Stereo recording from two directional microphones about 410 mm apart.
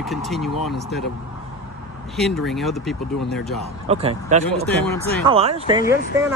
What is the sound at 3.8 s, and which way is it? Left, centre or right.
Speech, centre.